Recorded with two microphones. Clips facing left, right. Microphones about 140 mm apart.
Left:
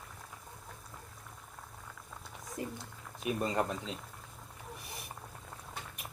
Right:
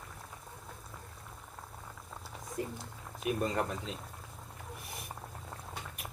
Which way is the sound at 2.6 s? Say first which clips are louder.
Right 2 dB; 20° left (ahead or behind).